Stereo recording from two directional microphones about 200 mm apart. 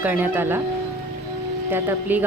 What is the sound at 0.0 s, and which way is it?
Speech, 10° right (ahead or behind).